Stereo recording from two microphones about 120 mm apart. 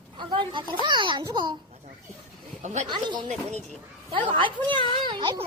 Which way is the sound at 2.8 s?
40° right (ahead or behind).